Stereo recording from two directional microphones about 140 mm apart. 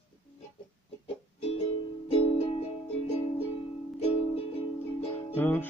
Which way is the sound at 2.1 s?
45° left (ahead or behind).